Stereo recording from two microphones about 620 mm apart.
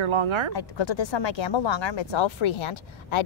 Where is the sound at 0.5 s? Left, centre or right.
Left.